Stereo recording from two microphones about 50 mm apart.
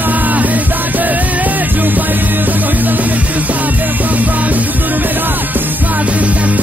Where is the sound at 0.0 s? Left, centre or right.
Right.